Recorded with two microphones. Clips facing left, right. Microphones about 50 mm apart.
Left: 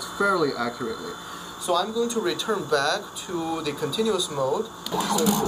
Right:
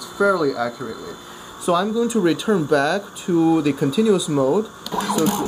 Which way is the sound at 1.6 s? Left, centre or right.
Centre.